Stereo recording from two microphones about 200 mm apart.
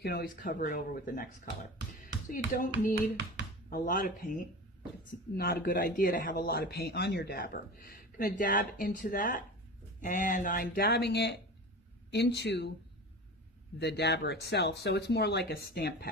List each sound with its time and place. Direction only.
0.0 s a man's voice: 50° left (ahead or behind)
3.7 s a man's voice: 45° left (ahead or behind)
13.7 s speech: 55° left (ahead or behind)